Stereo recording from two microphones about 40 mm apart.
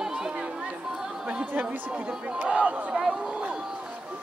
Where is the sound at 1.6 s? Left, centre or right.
Right.